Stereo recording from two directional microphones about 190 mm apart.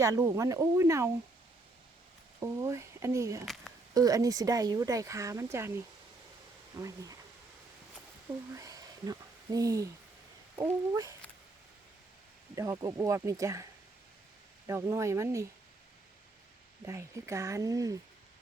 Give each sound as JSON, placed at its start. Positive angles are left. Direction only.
{"t": 0.0, "sound": "speech", "side_deg": -15}
{"t": 2.4, "sound": "speech", "side_deg": -15}
{"t": 3.4, "sound": "speech", "side_deg": 0}
{"t": 3.9, "sound": "speech", "side_deg": -20}
{"t": 6.7, "sound": "speech", "side_deg": -15}
{"t": 8.5, "sound": "a sound", "side_deg": -20}
{"t": 10.5, "sound": "speech", "side_deg": -15}
{"t": 12.5, "sound": "speech", "side_deg": -20}
{"t": 14.7, "sound": "speech", "side_deg": -15}
{"t": 16.8, "sound": "speech", "side_deg": -15}